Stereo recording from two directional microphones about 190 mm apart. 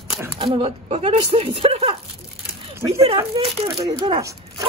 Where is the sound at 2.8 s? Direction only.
15° right (ahead or behind).